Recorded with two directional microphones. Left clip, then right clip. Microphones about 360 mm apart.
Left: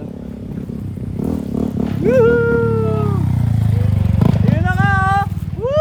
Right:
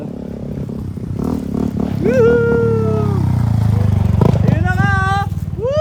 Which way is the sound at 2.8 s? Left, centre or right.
Centre.